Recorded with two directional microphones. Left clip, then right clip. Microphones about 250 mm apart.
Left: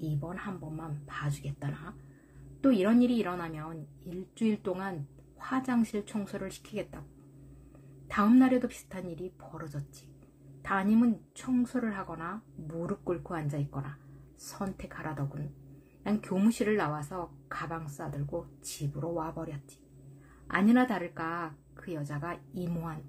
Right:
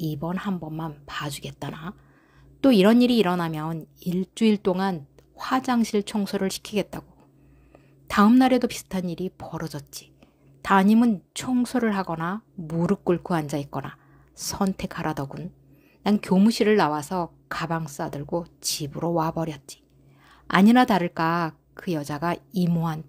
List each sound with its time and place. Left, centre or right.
0.2 s speech: right
8.1 s speech: right